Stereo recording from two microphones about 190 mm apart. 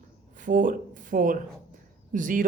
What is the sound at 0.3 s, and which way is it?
A woman's voice, 45° right (ahead or behind).